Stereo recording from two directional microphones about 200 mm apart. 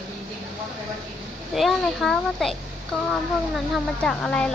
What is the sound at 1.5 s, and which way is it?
A child's voice, centre (ahead or behind).